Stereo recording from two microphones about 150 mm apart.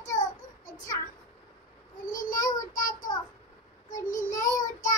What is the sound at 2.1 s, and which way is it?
Child singing, 65° left (ahead or behind).